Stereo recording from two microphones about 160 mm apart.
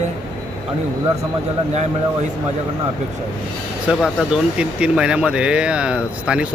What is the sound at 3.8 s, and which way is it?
Speech, 5° right (ahead or behind).